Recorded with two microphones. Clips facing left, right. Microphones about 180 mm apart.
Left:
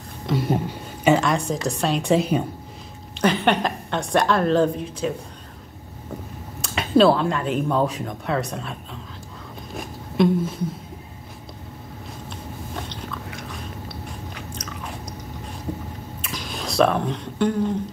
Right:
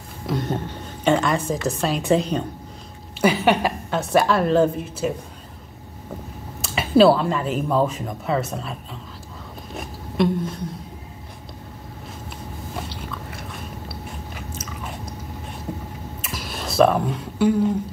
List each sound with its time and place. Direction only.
0.3 s a woman's voice: 10° left (ahead or behind)
3.2 s a woman's voice: 5° right (ahead or behind)
6.6 s a woman's voice: 5° right (ahead or behind)
9.8 s a sound: centre (ahead or behind)
12.7 s biting: 5° right (ahead or behind)
16.2 s a sound: 5° right (ahead or behind)